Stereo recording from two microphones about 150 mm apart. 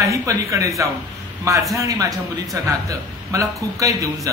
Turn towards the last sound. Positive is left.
turn(degrees=-20)  # may be behind; listen again after turning